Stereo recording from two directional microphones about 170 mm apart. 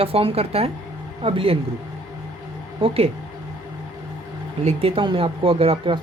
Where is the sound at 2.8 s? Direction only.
35° right (ahead or behind).